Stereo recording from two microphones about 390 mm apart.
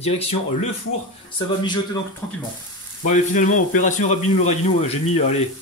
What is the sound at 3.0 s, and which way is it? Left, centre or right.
A man's voice, centre.